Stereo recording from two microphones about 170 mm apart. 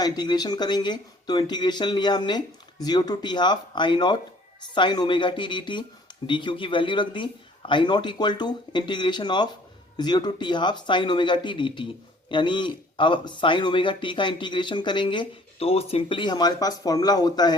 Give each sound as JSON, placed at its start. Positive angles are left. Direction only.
{"t": 0.0, "sound": "a man's voice", "side_deg": 25}